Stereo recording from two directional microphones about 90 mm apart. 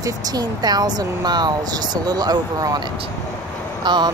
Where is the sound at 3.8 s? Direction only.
55° right (ahead or behind).